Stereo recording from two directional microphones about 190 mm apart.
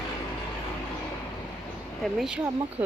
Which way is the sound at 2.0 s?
5° right (ahead or behind).